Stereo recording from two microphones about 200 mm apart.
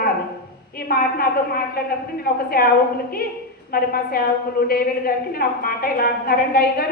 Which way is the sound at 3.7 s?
50° left (ahead or behind).